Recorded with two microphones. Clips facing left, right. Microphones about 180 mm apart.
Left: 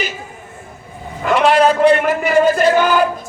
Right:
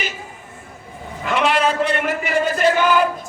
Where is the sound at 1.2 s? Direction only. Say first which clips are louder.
Left 6 dB; 40° left (ahead or behind).